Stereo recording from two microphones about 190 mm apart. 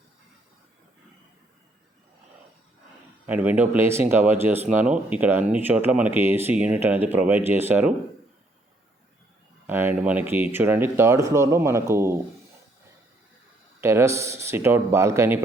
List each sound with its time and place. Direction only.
3.2 s speech: 10° right (ahead or behind)
9.6 s speech: 10° right (ahead or behind)
13.8 s speech: 15° right (ahead or behind)